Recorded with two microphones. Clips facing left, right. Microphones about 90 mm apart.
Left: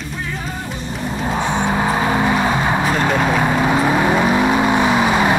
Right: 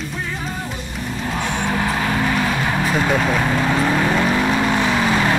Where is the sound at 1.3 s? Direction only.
15° left (ahead or behind).